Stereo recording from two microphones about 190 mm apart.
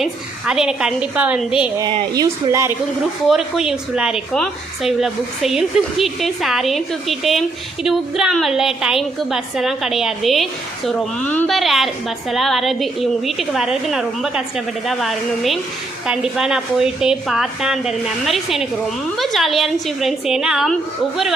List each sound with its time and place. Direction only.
0.0 s a woman's voice: 5° right (ahead or behind)
1.8 s speech: 25° right (ahead or behind)
3.2 s a woman's voice: centre (ahead or behind)